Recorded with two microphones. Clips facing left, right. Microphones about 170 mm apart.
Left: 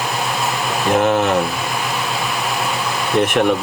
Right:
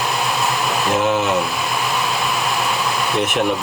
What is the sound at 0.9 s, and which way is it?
Speech, 55° left (ahead or behind).